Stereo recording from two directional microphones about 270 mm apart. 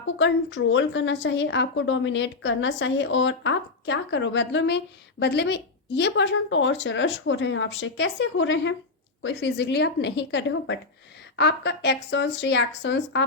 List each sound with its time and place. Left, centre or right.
0.0 s a woman's voice: left